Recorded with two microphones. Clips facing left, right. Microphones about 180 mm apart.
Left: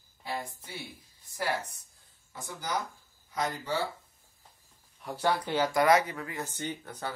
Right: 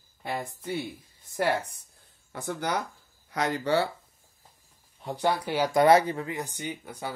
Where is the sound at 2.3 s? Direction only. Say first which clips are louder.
Right 5 dB; 65° right (ahead or behind).